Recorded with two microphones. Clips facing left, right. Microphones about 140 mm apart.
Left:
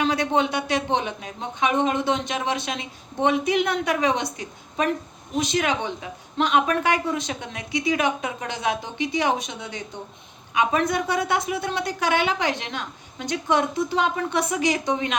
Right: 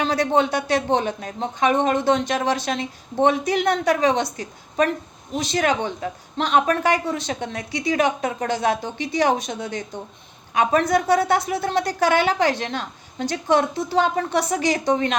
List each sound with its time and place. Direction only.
0.0 s speech: 40° right (ahead or behind)